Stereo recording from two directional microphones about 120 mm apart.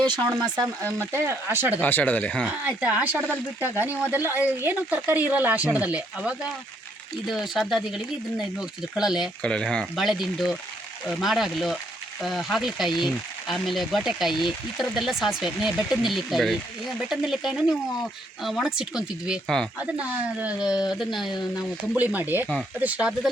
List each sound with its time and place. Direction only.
0.9 s speech: 20° right (ahead or behind)
1.8 s speech: 15° left (ahead or behind)
2.6 s speech: 15° right (ahead or behind)
9.4 s speech: 5° left (ahead or behind)
21.9 s speech: 15° right (ahead or behind)